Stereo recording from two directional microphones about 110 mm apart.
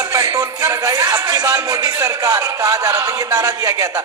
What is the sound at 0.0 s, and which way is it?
A man's voice, 25° right (ahead or behind).